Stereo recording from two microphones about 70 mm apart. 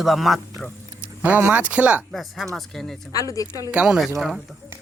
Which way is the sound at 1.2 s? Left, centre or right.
Right.